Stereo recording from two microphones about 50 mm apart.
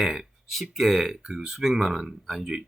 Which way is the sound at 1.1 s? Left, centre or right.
Centre.